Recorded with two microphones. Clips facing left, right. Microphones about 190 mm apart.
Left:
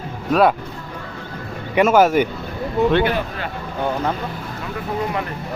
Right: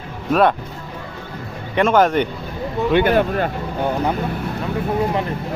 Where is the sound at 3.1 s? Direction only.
45° right (ahead or behind).